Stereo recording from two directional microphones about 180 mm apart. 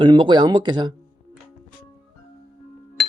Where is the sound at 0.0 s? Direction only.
25° right (ahead or behind).